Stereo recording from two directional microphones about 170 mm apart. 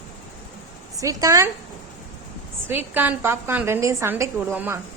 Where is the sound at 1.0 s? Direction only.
20° right (ahead or behind).